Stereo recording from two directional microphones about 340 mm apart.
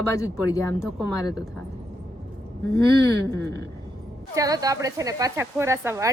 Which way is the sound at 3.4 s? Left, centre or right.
Right.